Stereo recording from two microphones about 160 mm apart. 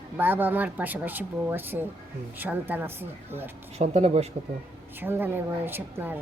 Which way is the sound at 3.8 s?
40° right (ahead or behind).